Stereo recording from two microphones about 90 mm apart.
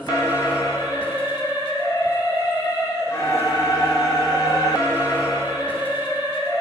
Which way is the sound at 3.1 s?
30° left (ahead or behind).